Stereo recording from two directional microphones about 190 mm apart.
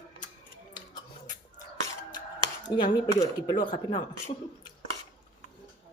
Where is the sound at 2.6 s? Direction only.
25° left (ahead or behind).